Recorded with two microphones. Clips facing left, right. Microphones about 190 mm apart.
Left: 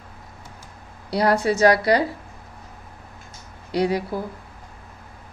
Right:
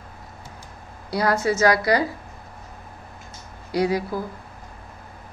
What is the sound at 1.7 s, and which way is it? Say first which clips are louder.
Speech: left 2 dB; 30° left (ahead or behind).